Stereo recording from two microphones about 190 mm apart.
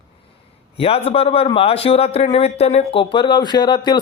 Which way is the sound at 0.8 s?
30° left (ahead or behind).